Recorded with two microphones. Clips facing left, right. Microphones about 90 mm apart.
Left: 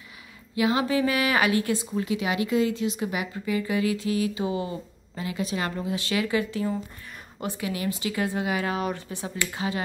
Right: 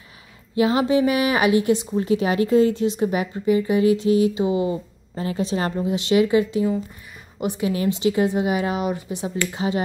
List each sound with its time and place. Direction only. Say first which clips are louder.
0.6 s a woman's voice: right 5 dB; 30° right (ahead or behind)
2.0 s a woman's voice: right 6 dB; 35° right (ahead or behind); by 4.7 s 20° right (ahead or behind)
5.1 s a woman's voice: right 6 dB; 35° right (ahead or behind); by 9.3 s 15° right (ahead or behind)